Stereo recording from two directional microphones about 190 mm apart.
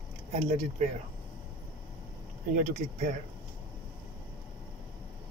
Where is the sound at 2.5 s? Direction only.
40° right (ahead or behind).